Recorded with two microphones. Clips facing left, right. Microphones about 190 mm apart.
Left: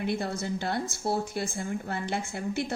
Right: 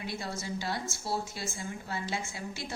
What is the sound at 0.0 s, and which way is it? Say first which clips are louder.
A woman's voice: left 7 dB; 60° left (ahead or behind).